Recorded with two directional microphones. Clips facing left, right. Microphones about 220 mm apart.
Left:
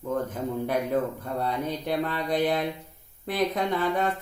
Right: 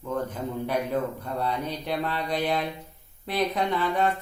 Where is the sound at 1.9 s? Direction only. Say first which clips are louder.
Left 1 dB; 50° left (ahead or behind).